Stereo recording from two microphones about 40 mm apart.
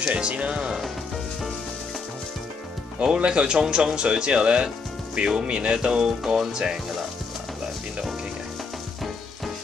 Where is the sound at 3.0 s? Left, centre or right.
Right.